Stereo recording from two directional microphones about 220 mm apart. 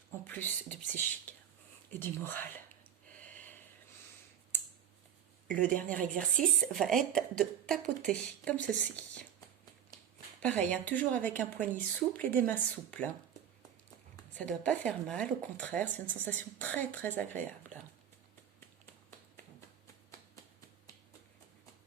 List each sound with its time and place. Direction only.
0.3 s speech: 5° left (ahead or behind)
1.9 s speech: 10° left (ahead or behind)
5.5 s speech: 5° left (ahead or behind)
6.0 s speech: 40° right (ahead or behind)
6.6 s speech: centre (ahead or behind)
10.4 s speech: 5° left (ahead or behind)
14.3 s speech: 5° left (ahead or behind)